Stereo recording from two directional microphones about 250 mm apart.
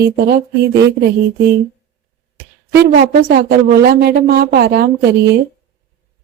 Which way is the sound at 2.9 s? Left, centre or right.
Right.